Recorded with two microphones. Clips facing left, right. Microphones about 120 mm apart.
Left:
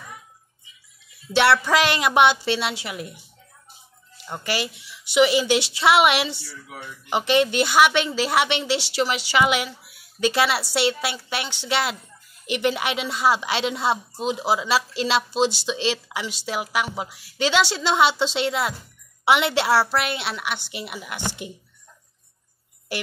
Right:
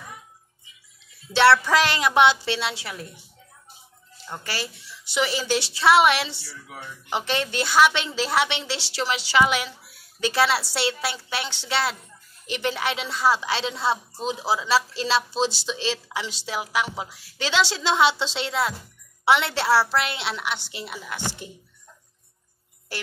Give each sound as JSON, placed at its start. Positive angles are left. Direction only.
{"t": 1.3, "sound": "speech", "side_deg": 15}
{"t": 4.3, "sound": "speech", "side_deg": 15}
{"t": 21.4, "sound": "speech", "side_deg": 65}